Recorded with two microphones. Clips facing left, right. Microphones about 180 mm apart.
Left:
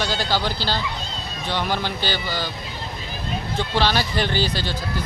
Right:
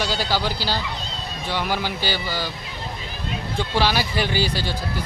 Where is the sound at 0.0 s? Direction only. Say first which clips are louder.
Even; 10° right (ahead or behind).